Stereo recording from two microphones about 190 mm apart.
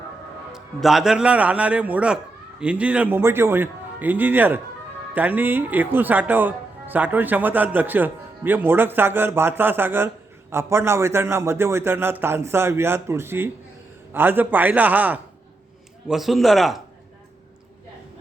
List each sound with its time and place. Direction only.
0.5 s a man's voice: centre (ahead or behind)